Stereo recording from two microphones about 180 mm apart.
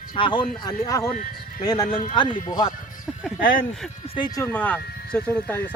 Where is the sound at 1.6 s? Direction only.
20° left (ahead or behind).